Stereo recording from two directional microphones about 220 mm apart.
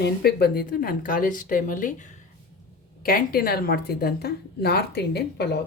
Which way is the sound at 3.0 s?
40° left (ahead or behind).